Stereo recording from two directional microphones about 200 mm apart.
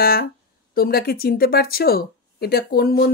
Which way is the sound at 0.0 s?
50° left (ahead or behind).